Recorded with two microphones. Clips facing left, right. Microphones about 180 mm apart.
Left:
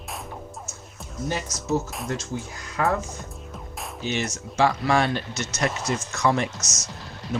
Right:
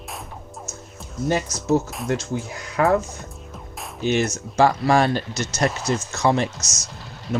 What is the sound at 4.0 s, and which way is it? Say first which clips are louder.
Speech: right 7 dB; 50° right (ahead or behind).